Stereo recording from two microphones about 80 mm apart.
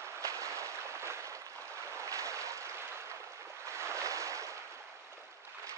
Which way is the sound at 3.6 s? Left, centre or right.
Right.